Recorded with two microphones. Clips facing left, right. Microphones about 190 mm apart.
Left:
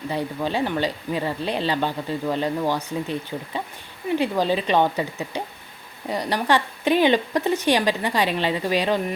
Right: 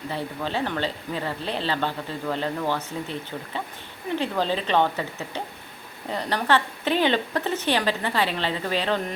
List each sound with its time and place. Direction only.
0.1 s speech: 15° left (ahead or behind)